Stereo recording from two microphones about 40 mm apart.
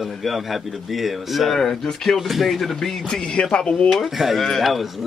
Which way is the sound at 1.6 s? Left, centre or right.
Centre.